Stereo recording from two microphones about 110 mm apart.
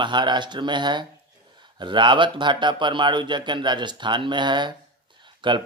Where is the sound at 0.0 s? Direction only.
45° right (ahead or behind).